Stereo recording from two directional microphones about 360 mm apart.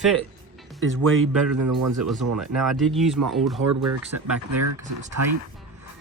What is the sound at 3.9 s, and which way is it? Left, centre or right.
Speech, right.